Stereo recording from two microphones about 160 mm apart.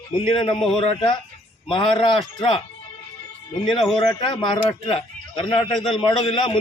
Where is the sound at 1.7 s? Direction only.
30° left (ahead or behind).